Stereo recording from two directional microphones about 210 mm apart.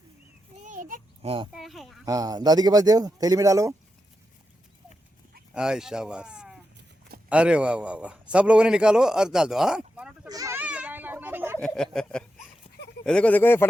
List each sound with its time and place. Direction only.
0.6 s a sound: 40° right (ahead or behind)
1.5 s speech: centre (ahead or behind)
2.0 s speech: 15° right (ahead or behind)
5.5 s a man's voice: 5° right (ahead or behind)
10.2 s goat: 15° right (ahead or behind)
11.6 s a man's voice: 5° left (ahead or behind)